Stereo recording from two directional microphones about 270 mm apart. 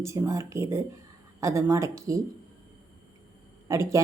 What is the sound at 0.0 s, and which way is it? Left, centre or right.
A woman's voice, centre.